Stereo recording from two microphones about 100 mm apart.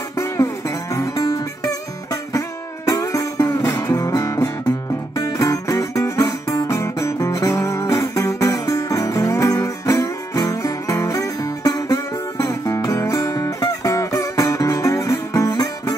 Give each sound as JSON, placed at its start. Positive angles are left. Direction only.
{"t": 0.2, "sound": "music", "side_deg": 30}
{"t": 5.1, "sound": "guitar", "side_deg": 35}